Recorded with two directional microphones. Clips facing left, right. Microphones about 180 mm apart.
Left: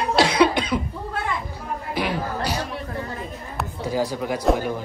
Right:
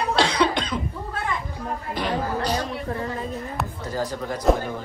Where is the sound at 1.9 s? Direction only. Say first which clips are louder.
Even; 5° left (ahead or behind).